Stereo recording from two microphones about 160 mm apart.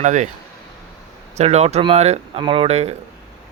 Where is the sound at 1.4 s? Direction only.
40° right (ahead or behind).